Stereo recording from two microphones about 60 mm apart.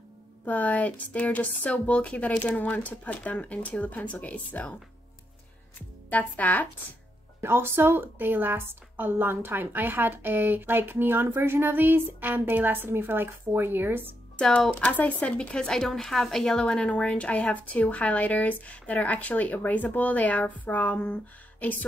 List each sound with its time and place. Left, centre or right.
0.5 s speech: left
5.8 s speech: left
7.4 s a woman's voice: right
14.7 s speech: left